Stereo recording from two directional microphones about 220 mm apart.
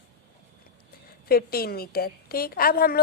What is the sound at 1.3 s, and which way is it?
A woman's voice, 45° left (ahead or behind).